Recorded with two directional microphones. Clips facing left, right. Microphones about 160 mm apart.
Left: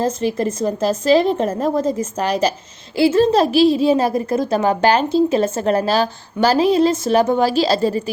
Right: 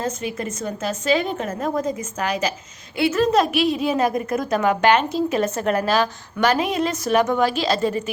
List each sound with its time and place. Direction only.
0.0 s a woman's voice: 35° left (ahead or behind)